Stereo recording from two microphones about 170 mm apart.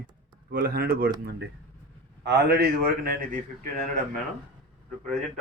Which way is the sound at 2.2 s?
80° right.